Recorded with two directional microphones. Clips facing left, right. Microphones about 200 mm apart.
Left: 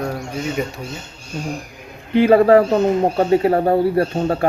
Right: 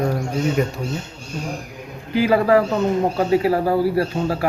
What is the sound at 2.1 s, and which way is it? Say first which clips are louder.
Speech: left 5 dB; 30° left (ahead or behind).